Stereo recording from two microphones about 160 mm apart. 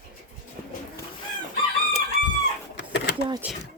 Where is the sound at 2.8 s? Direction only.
90° left.